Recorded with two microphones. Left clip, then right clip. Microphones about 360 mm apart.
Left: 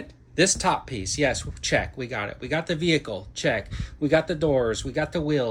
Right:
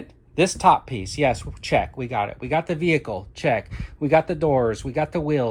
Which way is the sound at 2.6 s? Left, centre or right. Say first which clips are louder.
Right 2 dB; centre.